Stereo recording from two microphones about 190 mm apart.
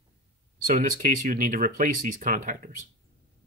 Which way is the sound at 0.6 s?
45° right (ahead or behind).